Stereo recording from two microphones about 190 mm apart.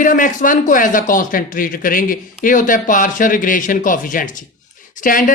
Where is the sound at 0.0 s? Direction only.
45° left (ahead or behind).